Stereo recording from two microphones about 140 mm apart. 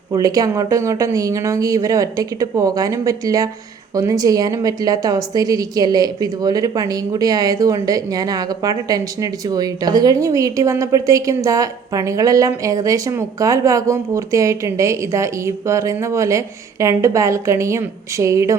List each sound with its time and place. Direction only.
0.1 s a woman's voice: 25° right (ahead or behind)